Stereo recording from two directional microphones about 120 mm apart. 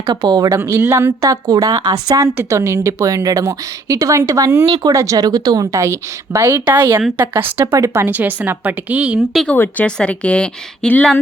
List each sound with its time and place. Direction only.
0.1 s a woman's voice: 35° right (ahead or behind); by 9.2 s 10° right (ahead or behind)
9.3 s a woman's voice: 5° left (ahead or behind)